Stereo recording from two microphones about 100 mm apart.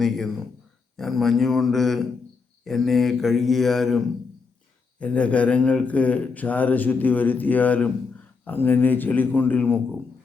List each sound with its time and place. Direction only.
0.0 s a man's voice: centre (ahead or behind); by 9.8 s 20° left (ahead or behind)